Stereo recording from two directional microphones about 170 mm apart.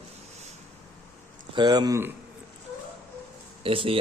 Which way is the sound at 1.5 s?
25° right (ahead or behind).